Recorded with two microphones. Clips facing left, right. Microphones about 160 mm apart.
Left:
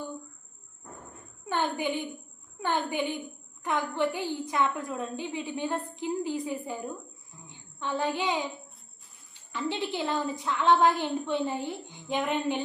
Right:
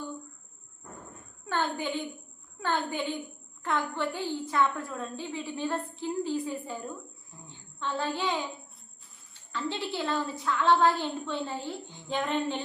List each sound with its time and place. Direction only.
1.5 s a woman's voice: 15° left (ahead or behind)